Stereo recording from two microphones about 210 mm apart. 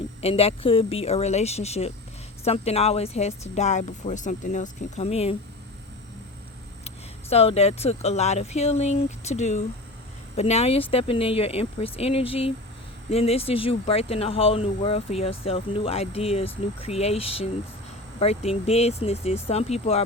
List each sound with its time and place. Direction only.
0.2 s speech: 30° left (ahead or behind)
6.8 s speech: 30° left (ahead or behind)